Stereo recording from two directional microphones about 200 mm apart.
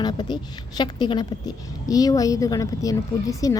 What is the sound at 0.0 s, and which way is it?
A woman's voice, 20° left (ahead or behind).